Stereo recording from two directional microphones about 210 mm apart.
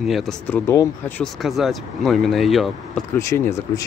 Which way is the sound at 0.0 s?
Centre (ahead or behind).